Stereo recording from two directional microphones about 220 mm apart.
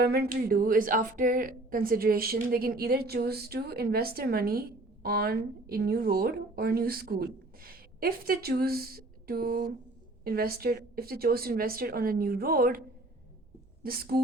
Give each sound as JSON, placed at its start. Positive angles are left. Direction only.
{"t": 0.0, "sound": "a woman's voice", "side_deg": -45}
{"t": 13.8, "sound": "a woman's voice", "side_deg": -45}